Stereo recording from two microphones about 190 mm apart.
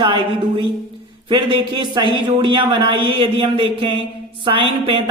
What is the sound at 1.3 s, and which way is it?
Speech, 25° right (ahead or behind).